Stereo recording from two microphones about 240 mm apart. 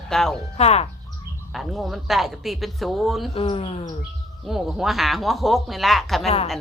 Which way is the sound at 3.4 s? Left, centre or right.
Left.